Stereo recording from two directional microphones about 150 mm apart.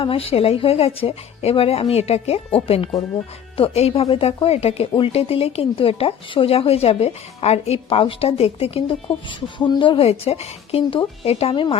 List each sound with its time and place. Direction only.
0.0 s speech: 40° left (ahead or behind)